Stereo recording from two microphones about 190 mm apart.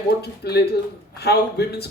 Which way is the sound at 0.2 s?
55° left (ahead or behind).